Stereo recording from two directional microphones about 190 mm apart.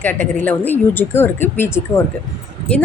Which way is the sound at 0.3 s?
10° left (ahead or behind).